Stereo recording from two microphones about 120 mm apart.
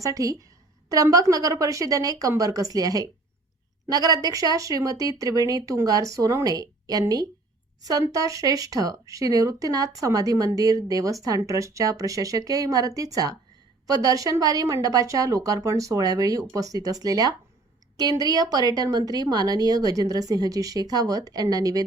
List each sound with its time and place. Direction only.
0.0 s a woman's voice: 30° right (ahead or behind)